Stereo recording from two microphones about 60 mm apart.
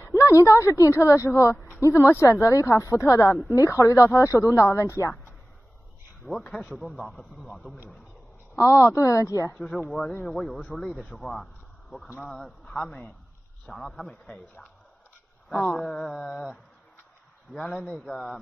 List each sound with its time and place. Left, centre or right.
0.1 s speech: left
6.2 s a man's voice: right
6.8 s a man's voice: centre
8.5 s speech: left
10.2 s a sound: centre
11.0 s a man's voice: centre
15.9 s a sound: centre
17.5 s speech: centre
18.0 s a man's voice: centre